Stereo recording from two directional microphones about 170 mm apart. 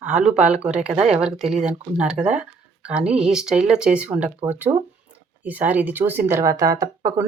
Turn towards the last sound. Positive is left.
turn(degrees=-20)  # may be behind; listen again after turning